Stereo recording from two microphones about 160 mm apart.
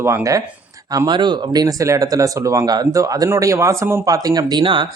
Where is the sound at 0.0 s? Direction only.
20° right (ahead or behind).